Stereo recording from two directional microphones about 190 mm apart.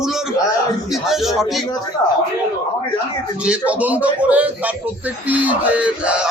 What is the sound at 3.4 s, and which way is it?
Speech, 5° right (ahead or behind).